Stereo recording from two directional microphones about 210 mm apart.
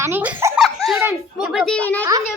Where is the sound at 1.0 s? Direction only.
5° right (ahead or behind).